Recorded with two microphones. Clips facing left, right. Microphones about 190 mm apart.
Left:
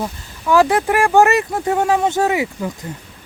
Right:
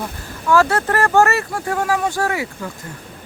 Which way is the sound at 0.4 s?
15° left (ahead or behind).